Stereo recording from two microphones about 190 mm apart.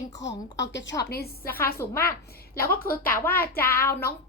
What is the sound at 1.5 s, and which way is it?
Speech, 10° left (ahead or behind).